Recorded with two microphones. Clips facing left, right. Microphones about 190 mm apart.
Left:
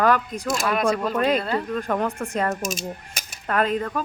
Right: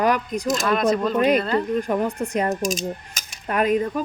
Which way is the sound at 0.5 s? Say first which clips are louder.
Right 1 dB; 10° left (ahead or behind).